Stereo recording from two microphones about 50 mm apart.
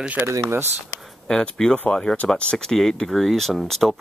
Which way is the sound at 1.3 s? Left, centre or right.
Centre.